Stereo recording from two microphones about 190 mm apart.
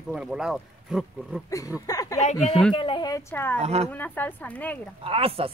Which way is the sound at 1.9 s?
20° left (ahead or behind).